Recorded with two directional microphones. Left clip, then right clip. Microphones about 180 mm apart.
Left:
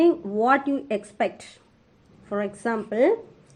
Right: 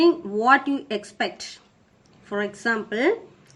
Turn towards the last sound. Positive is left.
turn(degrees=25)  # may be behind; listen again after turning